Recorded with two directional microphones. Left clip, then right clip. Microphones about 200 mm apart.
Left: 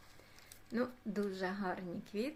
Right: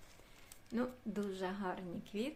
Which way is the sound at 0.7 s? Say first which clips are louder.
Left 2 dB; 5° left (ahead or behind).